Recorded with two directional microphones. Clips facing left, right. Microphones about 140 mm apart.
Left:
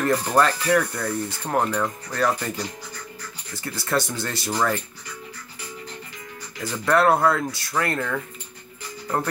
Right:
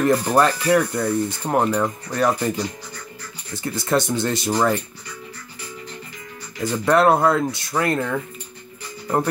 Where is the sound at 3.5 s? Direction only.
20° right (ahead or behind).